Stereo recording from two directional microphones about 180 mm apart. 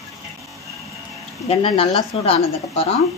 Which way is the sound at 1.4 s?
30° left (ahead or behind).